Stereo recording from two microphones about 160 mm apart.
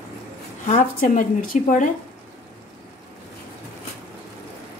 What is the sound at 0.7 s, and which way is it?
Speech, 55° left (ahead or behind).